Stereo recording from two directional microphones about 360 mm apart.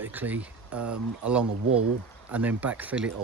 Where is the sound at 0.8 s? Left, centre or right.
Right.